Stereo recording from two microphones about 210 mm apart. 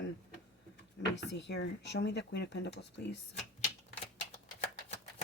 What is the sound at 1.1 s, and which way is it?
Speech, 55° left (ahead or behind).